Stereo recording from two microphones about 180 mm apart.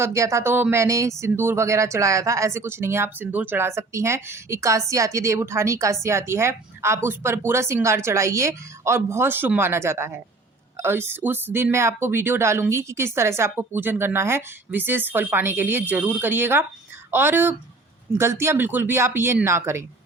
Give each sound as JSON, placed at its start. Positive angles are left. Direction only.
{"t": 0.0, "sound": "speech", "side_deg": -15}